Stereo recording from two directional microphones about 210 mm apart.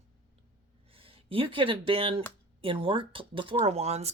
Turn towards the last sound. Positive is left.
turn(degrees=-30)  # may be behind; listen again after turning